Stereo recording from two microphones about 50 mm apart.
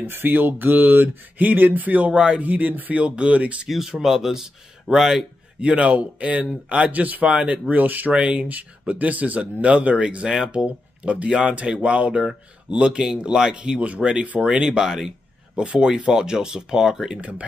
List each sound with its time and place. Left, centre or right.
0.0 s speech: right
2.1 s speech: centre
2.4 s speech: right
3.6 s a man's voice: centre
5.6 s speech: right
8.1 s speech: right
8.5 s speech: right
10.2 s speech: centre
10.5 s speech: right
13.7 s speech: right
14.9 s a man's voice: centre
15.5 s speech: right
17.2 s speech: right